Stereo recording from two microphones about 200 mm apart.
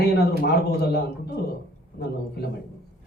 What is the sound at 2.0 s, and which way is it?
Speech, 55° left (ahead or behind).